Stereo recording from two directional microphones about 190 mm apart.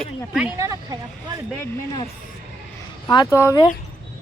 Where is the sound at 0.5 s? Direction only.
20° right (ahead or behind).